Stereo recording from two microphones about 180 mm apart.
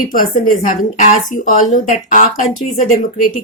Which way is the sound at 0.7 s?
45° left (ahead or behind).